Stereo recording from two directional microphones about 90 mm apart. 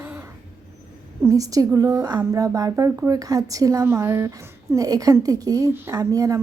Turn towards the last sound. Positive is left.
turn(degrees=-40)  # may be behind; listen again after turning